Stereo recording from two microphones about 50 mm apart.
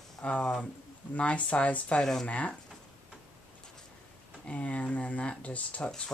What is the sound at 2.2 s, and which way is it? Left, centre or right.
Speech, left.